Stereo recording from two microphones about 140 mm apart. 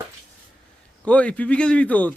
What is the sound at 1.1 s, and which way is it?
Speech, 10° left (ahead or behind).